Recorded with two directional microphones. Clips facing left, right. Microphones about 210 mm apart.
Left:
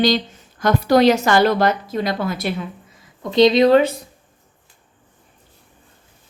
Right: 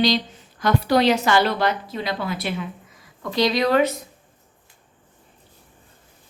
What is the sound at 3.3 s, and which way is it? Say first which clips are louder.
Speech: left 7 dB; 25° left (ahead or behind).